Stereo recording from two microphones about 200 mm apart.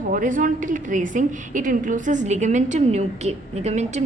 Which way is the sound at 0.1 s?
40° right (ahead or behind).